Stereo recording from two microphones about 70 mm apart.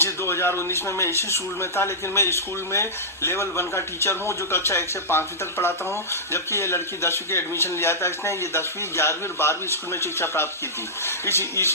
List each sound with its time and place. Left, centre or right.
0.0 s speech: left